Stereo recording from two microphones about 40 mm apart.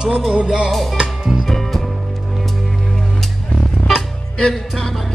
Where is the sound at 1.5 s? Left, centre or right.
Centre.